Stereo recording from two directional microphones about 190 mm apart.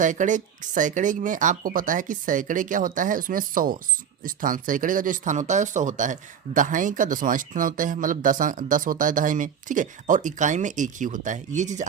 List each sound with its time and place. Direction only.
0.0 s speech: 40° right (ahead or behind)